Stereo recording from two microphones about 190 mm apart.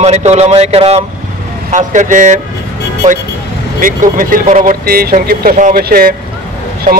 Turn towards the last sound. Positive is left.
turn(degrees=-40)  # may be behind; listen again after turning